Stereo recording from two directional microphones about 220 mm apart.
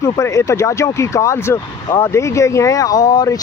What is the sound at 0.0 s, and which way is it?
Speech, 15° left (ahead or behind).